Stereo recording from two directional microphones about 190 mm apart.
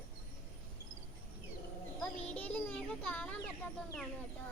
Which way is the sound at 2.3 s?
5° left (ahead or behind).